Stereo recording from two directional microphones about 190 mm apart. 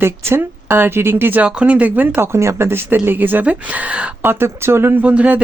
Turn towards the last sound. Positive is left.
turn(degrees=-5)  # may be behind; listen again after turning